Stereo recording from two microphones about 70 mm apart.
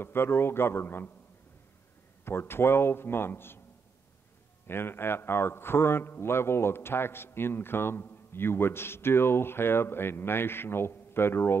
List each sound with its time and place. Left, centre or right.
0.0 s speech: left
2.2 s speech: left
4.6 s speech: left